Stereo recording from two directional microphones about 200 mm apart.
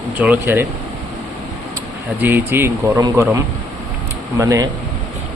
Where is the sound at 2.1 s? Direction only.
10° right (ahead or behind).